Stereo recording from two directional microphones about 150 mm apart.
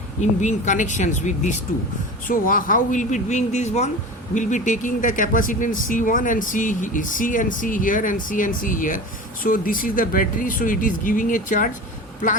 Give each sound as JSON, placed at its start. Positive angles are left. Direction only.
{"t": 0.2, "sound": "speech", "side_deg": 55}
{"t": 2.2, "sound": "speech", "side_deg": 65}